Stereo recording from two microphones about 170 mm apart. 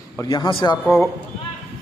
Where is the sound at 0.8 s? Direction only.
10° left (ahead or behind).